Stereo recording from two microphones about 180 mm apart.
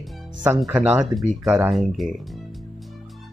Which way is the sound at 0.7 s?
10° right (ahead or behind).